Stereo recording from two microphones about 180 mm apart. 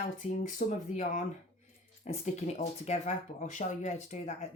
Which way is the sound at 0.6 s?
45° left (ahead or behind).